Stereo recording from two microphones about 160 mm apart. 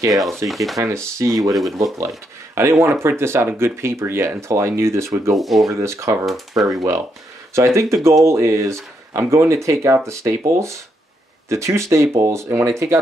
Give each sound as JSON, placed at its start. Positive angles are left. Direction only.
{"t": 0.1, "sound": "speech", "side_deg": 0}
{"t": 0.7, "sound": "speech", "side_deg": -20}
{"t": 1.5, "sound": "speech", "side_deg": 0}
{"t": 2.0, "sound": "speech", "side_deg": -20}
{"t": 5.3, "sound": "speech", "side_deg": 0}
{"t": 5.7, "sound": "speech", "side_deg": -15}
{"t": 6.2, "sound": "speech", "side_deg": 0}
{"t": 6.7, "sound": "speech", "side_deg": -20}